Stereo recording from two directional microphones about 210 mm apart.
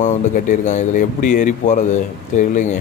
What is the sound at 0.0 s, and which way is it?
Speech, 35° left (ahead or behind).